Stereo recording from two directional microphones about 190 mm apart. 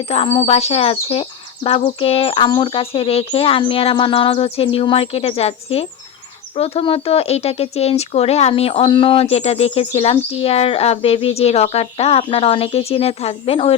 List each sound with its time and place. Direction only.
0.1 s speech: 30° left (ahead or behind)